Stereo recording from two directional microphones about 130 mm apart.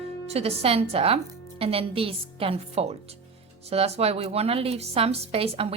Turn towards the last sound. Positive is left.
turn(degrees=-50)  # may be behind; listen again after turning